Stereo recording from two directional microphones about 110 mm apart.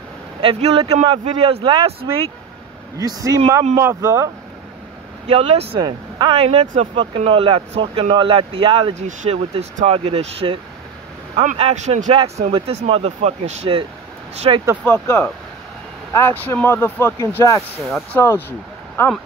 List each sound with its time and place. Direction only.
0.4 s speech: 60° right (ahead or behind)
3.0 s speech: 30° right (ahead or behind)
5.3 s speech: 70° right (ahead or behind)
5.8 s speech: 45° right (ahead or behind)
8.9 s speech: 90° right
12.5 s speech: 65° right (ahead or behind)
14.5 s speech: 50° right (ahead or behind)
14.9 s speech: 20° left (ahead or behind)